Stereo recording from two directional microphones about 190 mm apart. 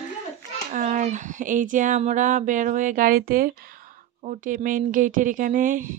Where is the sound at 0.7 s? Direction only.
45° right (ahead or behind).